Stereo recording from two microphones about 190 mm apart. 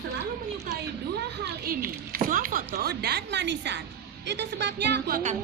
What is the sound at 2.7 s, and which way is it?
A woman's voice, 60° right (ahead or behind).